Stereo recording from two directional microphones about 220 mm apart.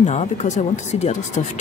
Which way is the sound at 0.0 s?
30° left (ahead or behind).